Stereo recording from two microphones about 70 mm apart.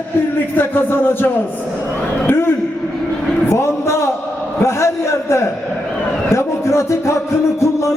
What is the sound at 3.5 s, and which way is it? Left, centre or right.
A man's voice, left.